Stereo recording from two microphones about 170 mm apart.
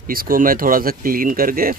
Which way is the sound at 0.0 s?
55° right (ahead or behind).